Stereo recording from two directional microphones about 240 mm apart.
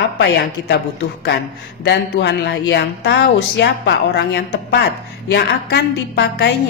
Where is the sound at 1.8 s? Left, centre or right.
Left.